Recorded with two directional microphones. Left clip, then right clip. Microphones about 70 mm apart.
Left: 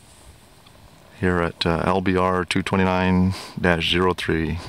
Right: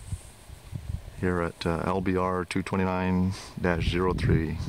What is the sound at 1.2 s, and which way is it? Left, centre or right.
Speech, left.